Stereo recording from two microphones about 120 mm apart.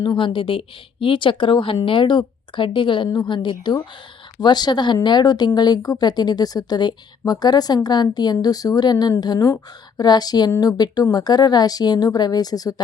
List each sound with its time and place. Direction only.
0.0 s a woman's voice: 40° left (ahead or behind)